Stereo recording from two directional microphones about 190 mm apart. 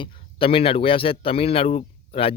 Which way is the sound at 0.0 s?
30° left (ahead or behind).